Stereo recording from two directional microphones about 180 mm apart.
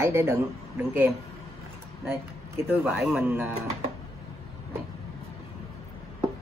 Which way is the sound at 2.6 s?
10° right (ahead or behind).